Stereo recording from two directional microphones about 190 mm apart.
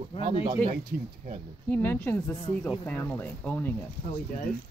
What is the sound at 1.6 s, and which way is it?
Speech, 10° left (ahead or behind).